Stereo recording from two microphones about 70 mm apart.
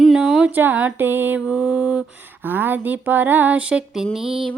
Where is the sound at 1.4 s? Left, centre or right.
Centre.